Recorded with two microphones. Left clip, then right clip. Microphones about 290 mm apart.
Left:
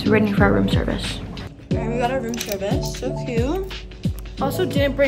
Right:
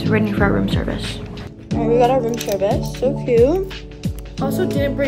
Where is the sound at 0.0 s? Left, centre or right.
Centre.